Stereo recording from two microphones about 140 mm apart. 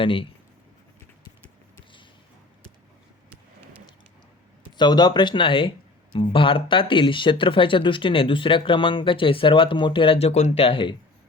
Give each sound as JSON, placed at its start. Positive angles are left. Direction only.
{"t": 0.0, "sound": "speech", "side_deg": 40}
{"t": 3.2, "sound": "vehicle", "side_deg": -10}
{"t": 4.8, "sound": "speech", "side_deg": 30}